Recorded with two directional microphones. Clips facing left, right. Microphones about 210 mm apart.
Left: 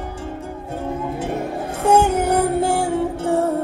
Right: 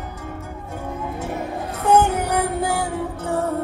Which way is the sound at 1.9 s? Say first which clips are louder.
Left 2 dB; 30° left (ahead or behind).